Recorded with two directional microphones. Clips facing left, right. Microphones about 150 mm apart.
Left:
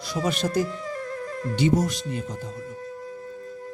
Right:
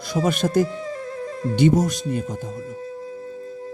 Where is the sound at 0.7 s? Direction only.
25° right (ahead or behind).